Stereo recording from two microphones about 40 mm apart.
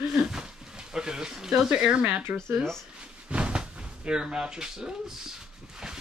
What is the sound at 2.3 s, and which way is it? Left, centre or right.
Speech, right.